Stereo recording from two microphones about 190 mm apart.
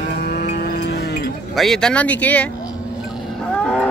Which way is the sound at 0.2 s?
55° left (ahead or behind).